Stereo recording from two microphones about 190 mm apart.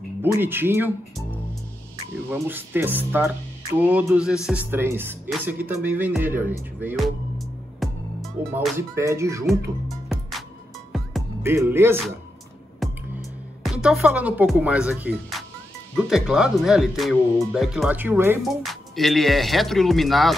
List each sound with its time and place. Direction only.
0.2 s speech: 10° right (ahead or behind)
2.2 s speech: 10° right (ahead or behind)
7.0 s music: centre (ahead or behind)
8.7 s speech: 15° right (ahead or behind)
9.5 s music: centre (ahead or behind)
11.4 s speech: 15° right (ahead or behind)
12.8 s music: centre (ahead or behind)
16.0 s speech: centre (ahead or behind)
18.4 s speech: centre (ahead or behind)